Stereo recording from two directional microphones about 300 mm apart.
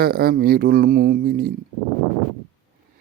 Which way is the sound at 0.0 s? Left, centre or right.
Right.